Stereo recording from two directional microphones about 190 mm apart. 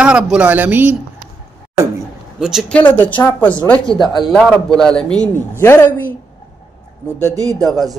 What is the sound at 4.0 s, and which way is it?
Speech, 25° left (ahead or behind).